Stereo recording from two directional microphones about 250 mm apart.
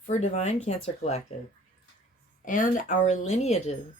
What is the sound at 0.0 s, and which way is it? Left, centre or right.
Speech, left.